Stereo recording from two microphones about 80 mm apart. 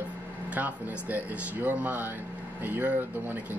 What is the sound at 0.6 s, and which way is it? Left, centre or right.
Speech, right.